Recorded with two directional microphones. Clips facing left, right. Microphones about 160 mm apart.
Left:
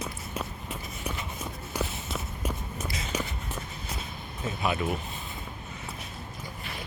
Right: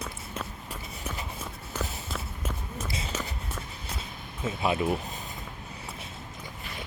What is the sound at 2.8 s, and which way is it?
Walk, 30° right (ahead or behind).